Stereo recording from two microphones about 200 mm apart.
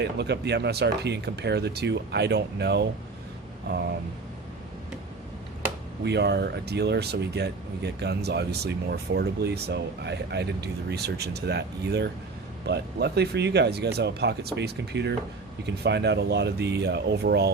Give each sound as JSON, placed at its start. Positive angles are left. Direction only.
{"t": 0.0, "sound": "speech", "side_deg": -55}
{"t": 6.1, "sound": "speech", "side_deg": -55}